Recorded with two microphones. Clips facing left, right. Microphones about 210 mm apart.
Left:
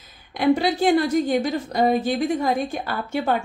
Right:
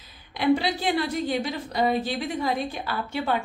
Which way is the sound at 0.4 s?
45° left (ahead or behind).